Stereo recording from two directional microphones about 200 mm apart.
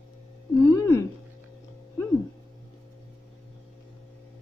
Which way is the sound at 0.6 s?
15° left (ahead or behind).